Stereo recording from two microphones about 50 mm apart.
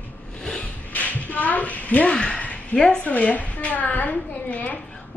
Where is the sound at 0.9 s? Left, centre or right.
Left.